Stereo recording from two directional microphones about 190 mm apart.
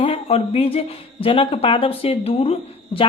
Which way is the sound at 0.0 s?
30° left (ahead or behind).